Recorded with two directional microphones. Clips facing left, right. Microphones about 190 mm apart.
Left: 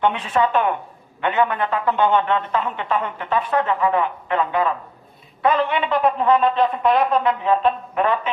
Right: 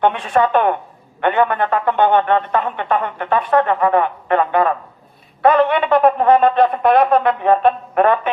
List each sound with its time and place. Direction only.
0.0 s speech: 60° right (ahead or behind)